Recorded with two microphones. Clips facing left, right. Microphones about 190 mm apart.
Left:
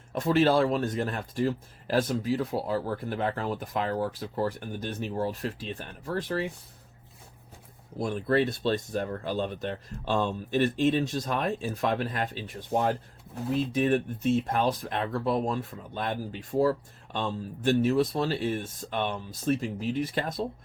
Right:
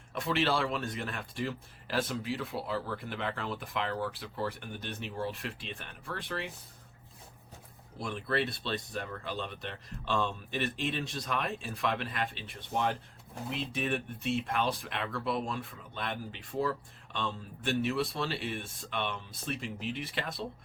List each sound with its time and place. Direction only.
0.1 s speech: 45° left (ahead or behind)
7.9 s speech: 40° left (ahead or behind)